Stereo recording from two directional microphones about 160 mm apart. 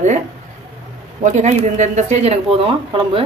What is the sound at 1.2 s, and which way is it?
A woman's voice, 50° right (ahead or behind).